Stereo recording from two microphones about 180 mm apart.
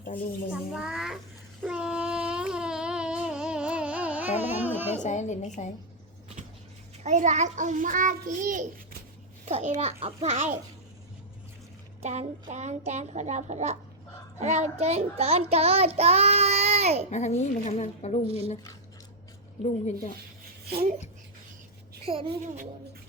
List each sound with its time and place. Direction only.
0.5 s a child's voice: 5° right (ahead or behind)
1.6 s a sound: 5° right (ahead or behind)
5.0 s a woman's voice: 40° left (ahead or behind)
7.0 s a child's voice: 40° right (ahead or behind)
12.0 s a child's voice: 40° right (ahead or behind)
16.0 s child singing: 35° right (ahead or behind)
17.1 s a woman's voice: 40° left (ahead or behind)
19.6 s a woman's voice: 40° left (ahead or behind)
20.7 s speech: 55° right (ahead or behind)
22.0 s a child's voice: 30° right (ahead or behind)